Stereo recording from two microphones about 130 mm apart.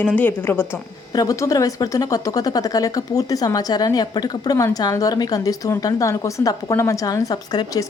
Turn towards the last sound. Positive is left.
turn(degrees=30)  # may be behind; listen again after turning